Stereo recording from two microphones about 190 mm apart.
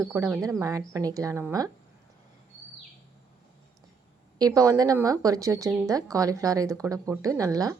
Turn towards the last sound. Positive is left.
turn(degrees=-20)  # may be behind; listen again after turning